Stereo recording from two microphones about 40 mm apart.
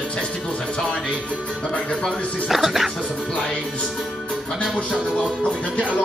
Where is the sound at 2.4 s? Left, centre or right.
Centre.